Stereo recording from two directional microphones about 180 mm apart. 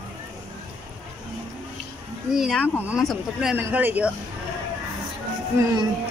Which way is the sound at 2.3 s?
Centre (ahead or behind).